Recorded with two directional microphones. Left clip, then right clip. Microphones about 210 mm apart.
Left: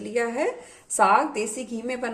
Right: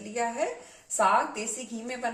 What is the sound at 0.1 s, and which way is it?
Speech, 40° left (ahead or behind).